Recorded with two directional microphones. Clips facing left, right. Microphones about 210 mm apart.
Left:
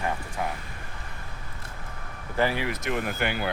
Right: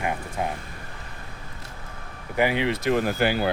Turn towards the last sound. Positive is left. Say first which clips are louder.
# right 6 dB
turn(degrees=-35)  # may be behind; listen again after turning